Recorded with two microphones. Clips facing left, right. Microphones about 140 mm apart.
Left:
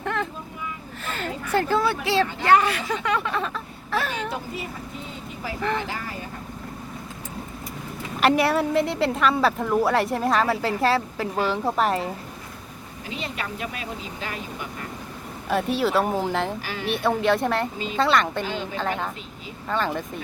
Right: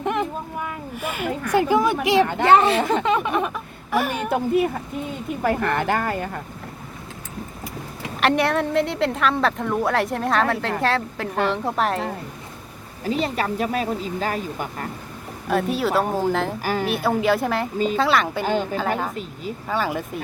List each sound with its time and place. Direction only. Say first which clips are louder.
0.0 s vehicle: right 4 dB; 15° right (ahead or behind)
1.0 s speech: right 4 dB; 10° right (ahead or behind)
2.2 s speech: right 7 dB; 55° right (ahead or behind)
2.5 s speech: right 3 dB; 25° right (ahead or behind)
4.3 s speech: right 12 dB; 55° right (ahead or behind)
8.2 s a woman's voice: even; centre (ahead or behind)
13.1 s speech: right 9 dB; 40° right (ahead or behind)
15.4 s a woman's voice: right 1 dB; centre (ahead or behind)
16.6 s a woman's voice: right 7 dB; 45° right (ahead or behind)
16.9 s a woman's voice: left 1 dB; 5° right (ahead or behind)
18.4 s a woman's voice: right 7 dB; 45° right (ahead or behind)
19.6 s a woman's voice: right 1 dB; 5° right (ahead or behind)